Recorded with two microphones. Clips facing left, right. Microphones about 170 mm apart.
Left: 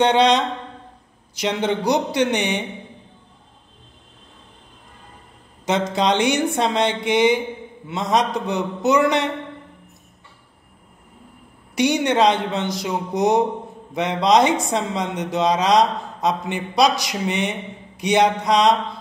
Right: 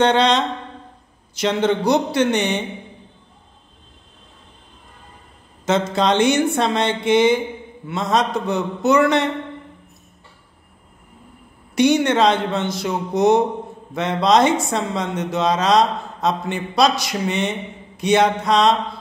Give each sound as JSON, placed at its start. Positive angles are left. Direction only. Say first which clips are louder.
{"t": 0.0, "sound": "speech", "louder": "even", "side_deg": 15}
{"t": 5.7, "sound": "speech", "louder": "right 1 dB", "side_deg": 15}
{"t": 11.7, "sound": "speech", "louder": "right 3 dB", "side_deg": 15}